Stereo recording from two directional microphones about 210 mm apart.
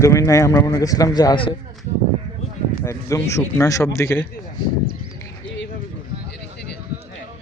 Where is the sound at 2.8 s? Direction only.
15° left (ahead or behind).